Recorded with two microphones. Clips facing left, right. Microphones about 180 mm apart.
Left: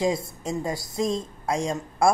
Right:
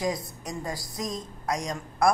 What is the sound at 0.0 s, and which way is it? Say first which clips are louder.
A woman's voice: left 5 dB; 25° left (ahead or behind).